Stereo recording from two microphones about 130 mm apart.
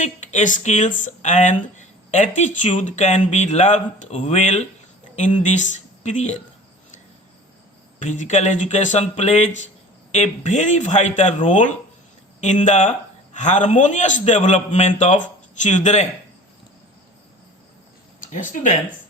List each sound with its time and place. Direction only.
0.0 s speech: 65° left (ahead or behind)
7.9 s a man's voice: 70° left (ahead or behind)
18.2 s speech: 85° left